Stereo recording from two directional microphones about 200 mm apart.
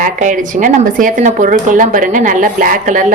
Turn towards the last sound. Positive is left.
turn(degrees=-40)  # may be behind; listen again after turning